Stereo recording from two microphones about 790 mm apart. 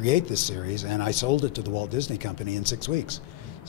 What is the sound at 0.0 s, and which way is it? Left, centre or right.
Speech, left.